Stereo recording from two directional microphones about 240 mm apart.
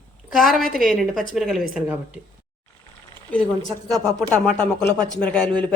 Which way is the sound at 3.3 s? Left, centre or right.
Centre.